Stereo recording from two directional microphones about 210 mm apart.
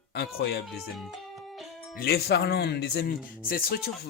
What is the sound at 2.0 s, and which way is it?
Speech, 50° left (ahead or behind).